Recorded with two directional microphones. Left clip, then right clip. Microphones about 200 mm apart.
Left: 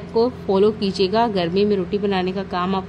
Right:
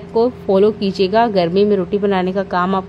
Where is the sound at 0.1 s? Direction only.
30° right (ahead or behind).